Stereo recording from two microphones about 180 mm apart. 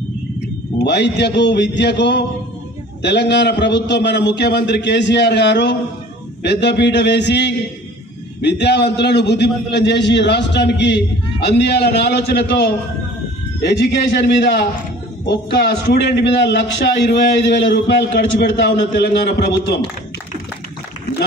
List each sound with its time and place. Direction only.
0.8 s a man's voice: 70° left (ahead or behind)